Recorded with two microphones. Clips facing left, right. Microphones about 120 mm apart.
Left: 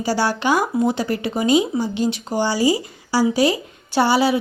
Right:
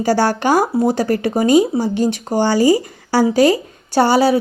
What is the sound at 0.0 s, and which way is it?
Speech, 50° right (ahead or behind).